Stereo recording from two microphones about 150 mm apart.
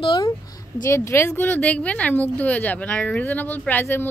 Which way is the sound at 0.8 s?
15° left (ahead or behind).